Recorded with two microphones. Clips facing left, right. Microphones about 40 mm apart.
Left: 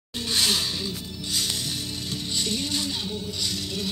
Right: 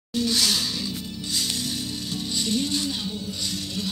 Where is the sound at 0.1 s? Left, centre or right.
Left.